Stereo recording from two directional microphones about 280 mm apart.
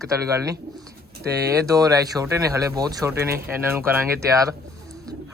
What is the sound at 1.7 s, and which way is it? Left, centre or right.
Speech, centre.